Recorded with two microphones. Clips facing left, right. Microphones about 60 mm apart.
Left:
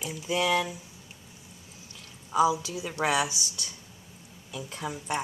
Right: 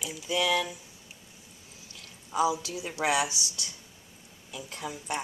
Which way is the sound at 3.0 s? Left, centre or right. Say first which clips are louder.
Left 1 dB; centre.